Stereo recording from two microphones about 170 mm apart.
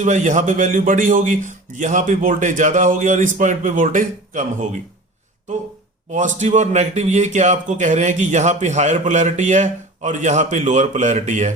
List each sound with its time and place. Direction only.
0.0 s a man's voice: 45° right (ahead or behind)
6.1 s a man's voice: 45° right (ahead or behind)